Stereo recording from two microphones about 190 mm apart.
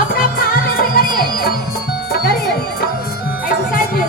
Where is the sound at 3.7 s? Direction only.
50° left (ahead or behind).